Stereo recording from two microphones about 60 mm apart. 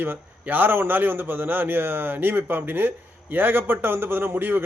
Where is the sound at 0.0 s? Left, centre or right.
Right.